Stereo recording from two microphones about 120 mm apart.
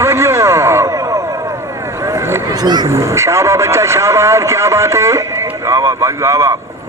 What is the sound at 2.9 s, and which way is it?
Speech, 25° right (ahead or behind).